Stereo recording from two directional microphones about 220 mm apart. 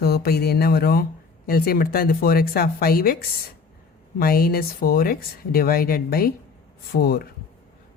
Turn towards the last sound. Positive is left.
turn(degrees=45)  # may be behind; listen again after turning